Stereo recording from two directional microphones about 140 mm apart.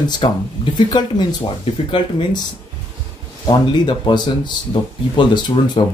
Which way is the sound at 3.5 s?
35° left (ahead or behind).